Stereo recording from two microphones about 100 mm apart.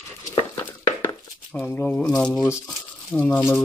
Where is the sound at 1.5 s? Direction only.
20° left (ahead or behind).